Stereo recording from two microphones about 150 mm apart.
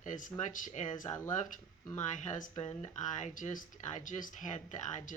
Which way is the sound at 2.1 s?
55° left (ahead or behind).